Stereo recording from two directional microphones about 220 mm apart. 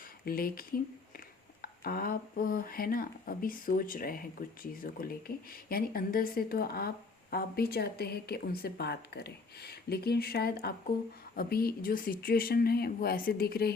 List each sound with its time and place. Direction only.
0.3 s speech: 40° left (ahead or behind)
1.6 s speech: 45° left (ahead or behind)